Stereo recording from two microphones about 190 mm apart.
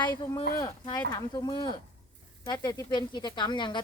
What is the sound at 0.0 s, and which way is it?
Speech, 20° left (ahead or behind).